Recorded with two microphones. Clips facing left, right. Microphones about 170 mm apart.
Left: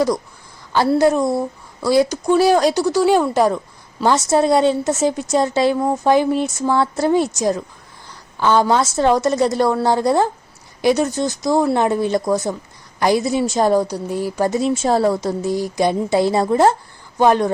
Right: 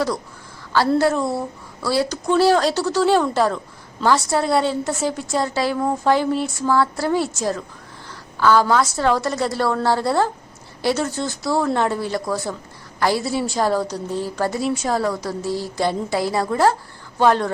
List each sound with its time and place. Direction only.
0.9 s a woman's voice: 15° left (ahead or behind)